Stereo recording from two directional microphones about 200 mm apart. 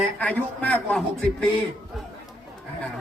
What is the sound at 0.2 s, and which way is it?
A woman's voice, 5° left (ahead or behind).